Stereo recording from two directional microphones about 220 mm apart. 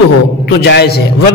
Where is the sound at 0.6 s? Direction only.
50° left (ahead or behind).